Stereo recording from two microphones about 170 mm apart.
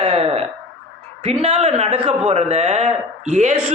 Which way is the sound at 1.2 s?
40° right (ahead or behind).